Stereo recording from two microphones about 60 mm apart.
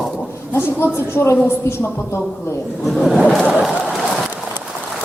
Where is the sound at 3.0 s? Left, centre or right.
Centre.